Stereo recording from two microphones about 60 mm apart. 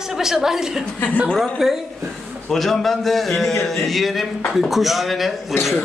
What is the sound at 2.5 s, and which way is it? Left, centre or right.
A man's voice, centre.